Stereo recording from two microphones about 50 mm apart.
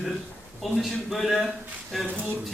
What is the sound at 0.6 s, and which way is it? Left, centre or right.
A man's voice, centre.